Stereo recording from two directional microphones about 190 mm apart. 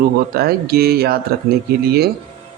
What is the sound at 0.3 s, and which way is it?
Speech, 55° right (ahead or behind).